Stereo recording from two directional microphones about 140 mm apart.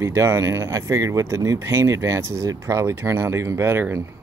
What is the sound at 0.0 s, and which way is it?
Speech, 20° right (ahead or behind).